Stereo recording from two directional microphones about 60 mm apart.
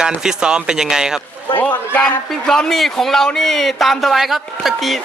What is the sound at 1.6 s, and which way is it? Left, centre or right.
Speech, left.